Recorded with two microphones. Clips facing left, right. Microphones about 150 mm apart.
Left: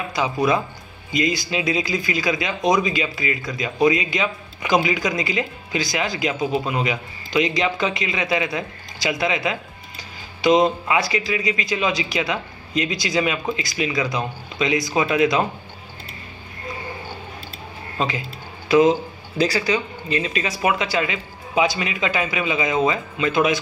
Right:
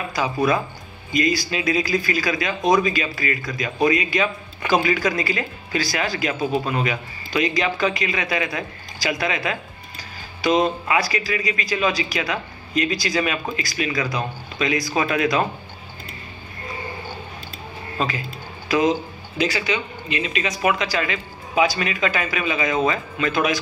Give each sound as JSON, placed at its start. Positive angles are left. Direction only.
{"t": 0.1, "sound": "a man's voice", "side_deg": 20}
{"t": 17.9, "sound": "a man's voice", "side_deg": 20}